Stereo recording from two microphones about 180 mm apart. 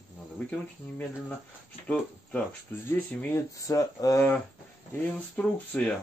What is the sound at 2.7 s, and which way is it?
Speech, 15° left (ahead or behind).